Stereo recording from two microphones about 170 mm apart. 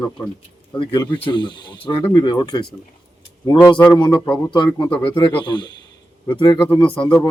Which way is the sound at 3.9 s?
25° left (ahead or behind).